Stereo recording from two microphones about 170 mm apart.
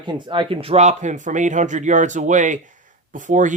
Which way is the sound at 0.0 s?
25° right (ahead or behind).